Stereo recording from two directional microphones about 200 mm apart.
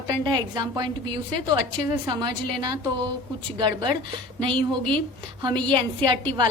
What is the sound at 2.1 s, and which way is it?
A woman's voice, 20° right (ahead or behind).